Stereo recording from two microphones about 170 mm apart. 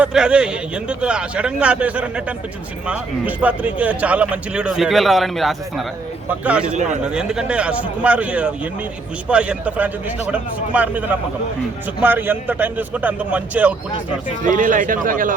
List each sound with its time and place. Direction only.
0.0 s a man's voice: 5° right (ahead or behind)
6.7 s speech: 45° right (ahead or behind)
7.0 s a man's voice: 5° right (ahead or behind)
14.4 s speech: 50° right (ahead or behind)